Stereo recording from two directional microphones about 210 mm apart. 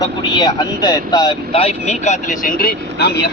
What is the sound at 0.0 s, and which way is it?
Speech, 20° left (ahead or behind).